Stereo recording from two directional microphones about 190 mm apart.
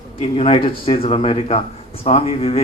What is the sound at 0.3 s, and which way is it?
Speech, 30° left (ahead or behind).